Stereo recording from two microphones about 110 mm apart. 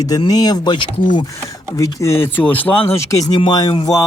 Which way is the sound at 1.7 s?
30° left (ahead or behind).